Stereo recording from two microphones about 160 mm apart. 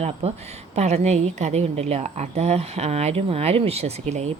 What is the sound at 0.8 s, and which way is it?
Speech, 45° right (ahead or behind).